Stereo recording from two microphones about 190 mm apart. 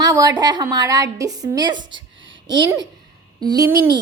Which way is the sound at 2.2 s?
80° right.